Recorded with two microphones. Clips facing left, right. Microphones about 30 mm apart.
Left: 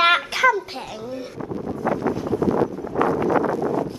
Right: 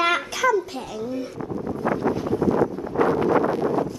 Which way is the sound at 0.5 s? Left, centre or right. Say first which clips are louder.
Right 3 dB; left.